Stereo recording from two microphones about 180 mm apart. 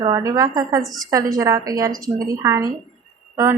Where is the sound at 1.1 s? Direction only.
20° right (ahead or behind).